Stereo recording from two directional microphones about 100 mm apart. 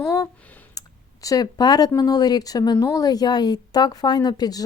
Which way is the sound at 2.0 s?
40° left (ahead or behind).